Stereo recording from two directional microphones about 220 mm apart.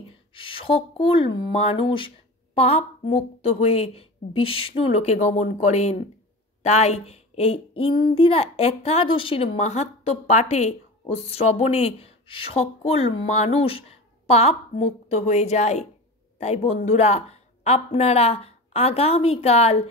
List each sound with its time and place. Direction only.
0.3 s speech: 25° left (ahead or behind)